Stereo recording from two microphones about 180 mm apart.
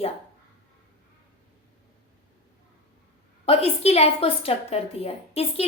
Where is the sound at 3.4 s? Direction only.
35° left (ahead or behind).